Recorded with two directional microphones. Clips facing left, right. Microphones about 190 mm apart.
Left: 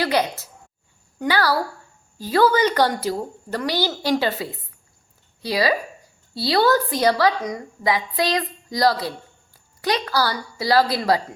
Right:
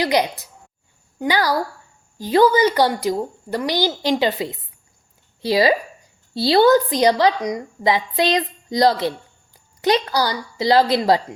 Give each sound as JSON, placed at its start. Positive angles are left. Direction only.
{"t": 0.0, "sound": "a woman's voice", "side_deg": -15}